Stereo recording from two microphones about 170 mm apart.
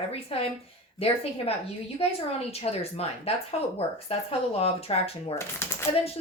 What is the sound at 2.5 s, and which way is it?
Speech, 35° left (ahead or behind).